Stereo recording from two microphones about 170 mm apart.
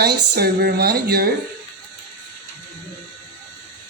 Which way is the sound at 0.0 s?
70° right (ahead or behind).